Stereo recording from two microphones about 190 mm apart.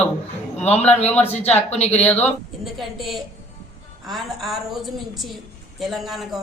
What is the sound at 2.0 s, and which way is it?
A woman's voice, 5° left (ahead or behind).